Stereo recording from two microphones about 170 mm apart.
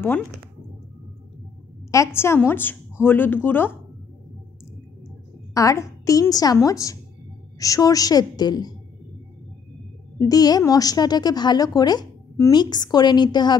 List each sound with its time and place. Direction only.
1.9 s a woman's voice: 15° left (ahead or behind)
5.5 s a woman's voice: 20° left (ahead or behind)
10.1 s a woman's voice: 20° left (ahead or behind)